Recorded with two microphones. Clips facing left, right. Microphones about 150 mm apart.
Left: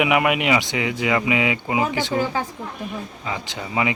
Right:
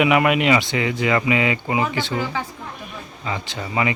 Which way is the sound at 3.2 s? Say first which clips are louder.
Right 4 dB; 15° left (ahead or behind).